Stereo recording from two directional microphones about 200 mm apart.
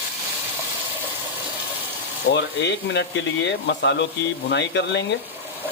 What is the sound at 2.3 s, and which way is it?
Speech, 60° left (ahead or behind).